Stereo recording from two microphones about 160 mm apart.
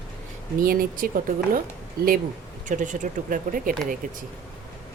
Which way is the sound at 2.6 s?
50° right (ahead or behind).